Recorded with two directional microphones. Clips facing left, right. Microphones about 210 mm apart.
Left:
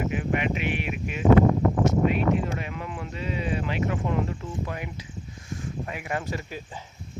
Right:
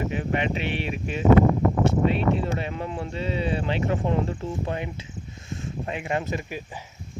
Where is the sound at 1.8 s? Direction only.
30° right (ahead or behind).